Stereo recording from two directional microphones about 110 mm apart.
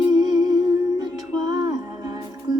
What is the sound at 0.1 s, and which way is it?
Humming, 35° right (ahead or behind).